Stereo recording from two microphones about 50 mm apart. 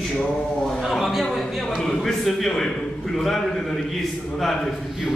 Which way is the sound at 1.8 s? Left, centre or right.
Centre.